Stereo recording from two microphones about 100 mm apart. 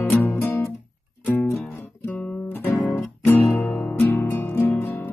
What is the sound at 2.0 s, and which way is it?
Guitar, 15° left (ahead or behind).